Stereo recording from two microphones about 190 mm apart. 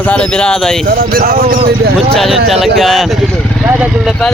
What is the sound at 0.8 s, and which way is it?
Speech, 50° right (ahead or behind).